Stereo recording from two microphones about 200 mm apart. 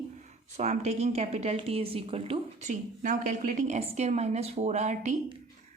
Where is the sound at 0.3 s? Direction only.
35° right (ahead or behind).